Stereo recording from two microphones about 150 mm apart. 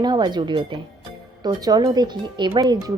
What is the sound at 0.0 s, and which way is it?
Speech, 30° right (ahead or behind).